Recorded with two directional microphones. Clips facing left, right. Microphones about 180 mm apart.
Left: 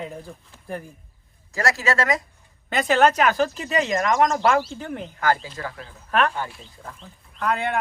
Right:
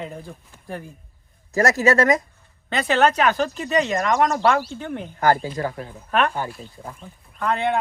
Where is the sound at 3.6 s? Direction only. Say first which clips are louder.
Right 1 dB; 35° right (ahead or behind).